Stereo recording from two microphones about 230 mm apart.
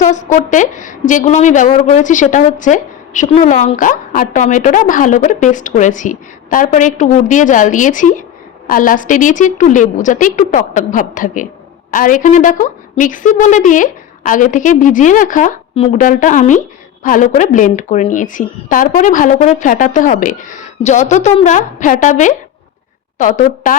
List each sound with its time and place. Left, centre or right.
0.0 s a woman's voice: left